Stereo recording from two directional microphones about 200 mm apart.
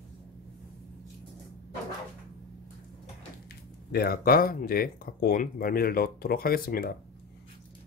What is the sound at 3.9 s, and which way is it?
Speech, 50° left (ahead or behind).